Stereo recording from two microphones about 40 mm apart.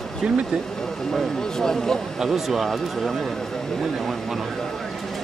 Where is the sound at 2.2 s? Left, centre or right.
Centre.